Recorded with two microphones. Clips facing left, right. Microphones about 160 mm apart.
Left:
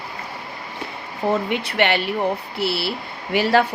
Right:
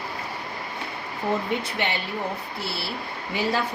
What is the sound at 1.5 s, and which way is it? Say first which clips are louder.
Speech: left 6 dB; 70° left (ahead or behind).